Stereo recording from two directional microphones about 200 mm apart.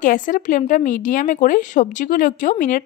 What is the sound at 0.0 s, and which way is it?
A woman's voice, 40° left (ahead or behind).